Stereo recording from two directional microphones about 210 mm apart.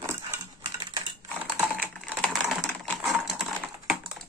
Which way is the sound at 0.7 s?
25° right (ahead or behind).